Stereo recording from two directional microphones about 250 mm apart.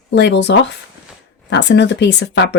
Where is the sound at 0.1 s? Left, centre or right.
Left.